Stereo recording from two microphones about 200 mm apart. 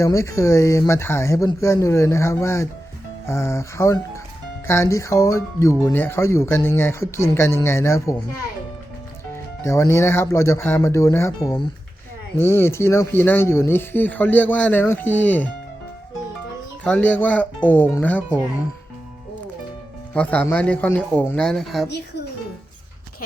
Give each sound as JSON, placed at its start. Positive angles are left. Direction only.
{"t": 0.0, "sound": "speech", "side_deg": 15}
{"t": 9.3, "sound": "speech", "side_deg": 15}
{"t": 16.8, "sound": "speech", "side_deg": 5}
{"t": 20.1, "sound": "speech", "side_deg": 10}